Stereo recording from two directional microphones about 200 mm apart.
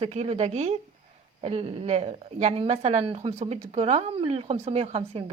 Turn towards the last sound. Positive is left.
turn(degrees=-30)  # may be behind; listen again after turning